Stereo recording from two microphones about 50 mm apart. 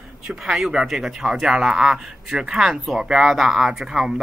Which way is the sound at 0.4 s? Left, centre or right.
Centre.